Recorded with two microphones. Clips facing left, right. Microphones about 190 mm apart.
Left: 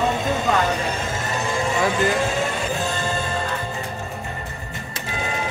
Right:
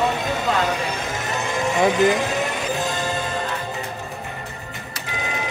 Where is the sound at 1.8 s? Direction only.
20° right (ahead or behind).